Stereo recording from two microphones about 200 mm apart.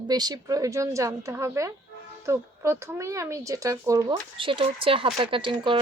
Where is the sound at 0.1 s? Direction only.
20° right (ahead or behind).